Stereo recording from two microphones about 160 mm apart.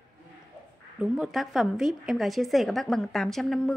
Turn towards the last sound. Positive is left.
turn(degrees=0)  # may be behind; listen again after turning